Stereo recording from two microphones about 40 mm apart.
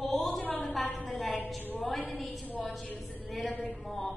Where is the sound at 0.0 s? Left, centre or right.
Centre.